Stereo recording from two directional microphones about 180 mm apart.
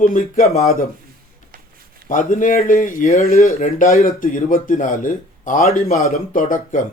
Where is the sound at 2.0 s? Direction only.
50° left (ahead or behind).